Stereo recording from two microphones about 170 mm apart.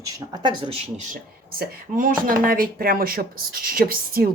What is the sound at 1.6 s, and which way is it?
A woman's voice, 55° right (ahead or behind).